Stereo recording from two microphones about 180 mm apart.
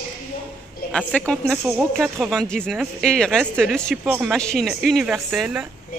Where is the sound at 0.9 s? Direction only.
5° left (ahead or behind).